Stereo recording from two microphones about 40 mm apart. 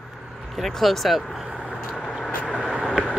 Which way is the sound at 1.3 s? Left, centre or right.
Centre.